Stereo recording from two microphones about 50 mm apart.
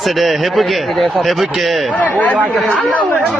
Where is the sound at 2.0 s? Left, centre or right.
Left.